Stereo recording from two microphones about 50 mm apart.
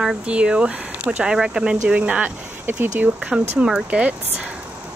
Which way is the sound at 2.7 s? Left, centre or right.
Right.